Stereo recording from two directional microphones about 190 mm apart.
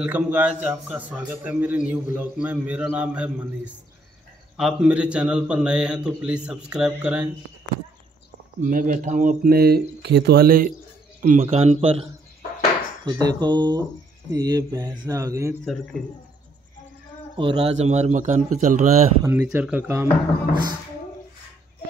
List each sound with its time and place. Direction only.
0.0 s a man's voice: 10° right (ahead or behind)
8.5 s speech: 45° right (ahead or behind)
11.2 s a man's voice: 35° right (ahead or behind); by 15.5 s 15° right (ahead or behind)
15.6 s a man's voice: centre (ahead or behind)
17.4 s speech: 30° right (ahead or behind)
19.2 s a man's voice: 10° right (ahead or behind)